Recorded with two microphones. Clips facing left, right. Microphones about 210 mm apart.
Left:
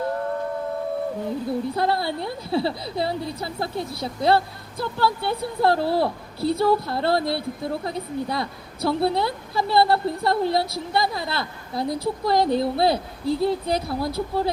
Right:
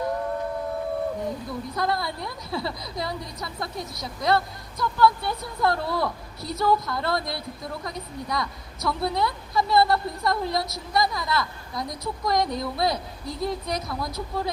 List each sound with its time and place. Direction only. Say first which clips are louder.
1.5 s speech: left 7 dB; 30° left (ahead or behind)